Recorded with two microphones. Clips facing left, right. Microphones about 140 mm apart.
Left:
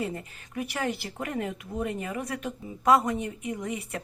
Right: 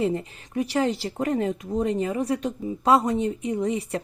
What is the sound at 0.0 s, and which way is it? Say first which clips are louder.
Speech: right 8 dB; 25° right (ahead or behind).